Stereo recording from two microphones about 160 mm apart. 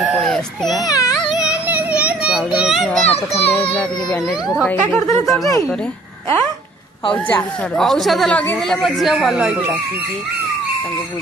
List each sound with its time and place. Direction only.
0.0 s baby cry: centre (ahead or behind)
0.8 s speech: 20° left (ahead or behind)
1.1 s music: 5° right (ahead or behind)
1.7 s children playing: 10° right (ahead or behind)
3.1 s a child's voice: 40° left (ahead or behind)
4.6 s speech: 10° left (ahead or behind)
5.2 s speech: centre (ahead or behind)
7.7 s speech: centre (ahead or behind)